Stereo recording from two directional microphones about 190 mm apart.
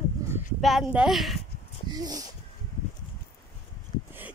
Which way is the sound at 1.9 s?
20° right (ahead or behind).